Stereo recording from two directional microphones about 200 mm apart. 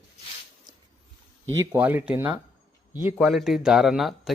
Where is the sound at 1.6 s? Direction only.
15° right (ahead or behind).